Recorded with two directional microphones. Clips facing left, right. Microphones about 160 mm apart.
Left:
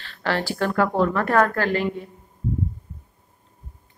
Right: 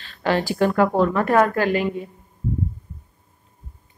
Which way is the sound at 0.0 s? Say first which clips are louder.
Right 4 dB; 15° right (ahead or behind).